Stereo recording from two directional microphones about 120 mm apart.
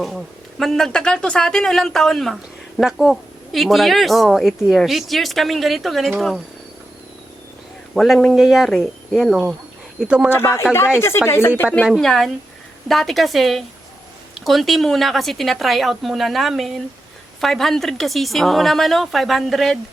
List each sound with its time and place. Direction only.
0.6 s speech: 5° left (ahead or behind)
7.9 s speech: centre (ahead or behind)
10.3 s speech: 20° left (ahead or behind)
11.9 s speech: centre (ahead or behind)